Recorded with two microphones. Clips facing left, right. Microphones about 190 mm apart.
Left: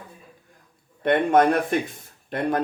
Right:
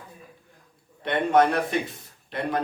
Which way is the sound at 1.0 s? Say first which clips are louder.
Left 3 dB; 50° left (ahead or behind).